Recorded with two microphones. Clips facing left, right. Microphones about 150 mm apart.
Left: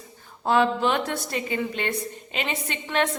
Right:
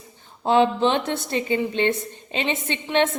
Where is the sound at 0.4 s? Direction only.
20° right (ahead or behind).